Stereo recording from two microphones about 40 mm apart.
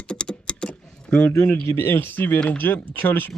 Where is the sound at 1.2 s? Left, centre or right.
Left.